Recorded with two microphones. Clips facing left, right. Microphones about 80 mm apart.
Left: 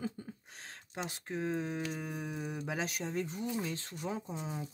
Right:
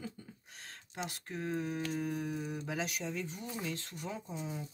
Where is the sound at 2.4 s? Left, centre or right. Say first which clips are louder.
Left 1 dB; left.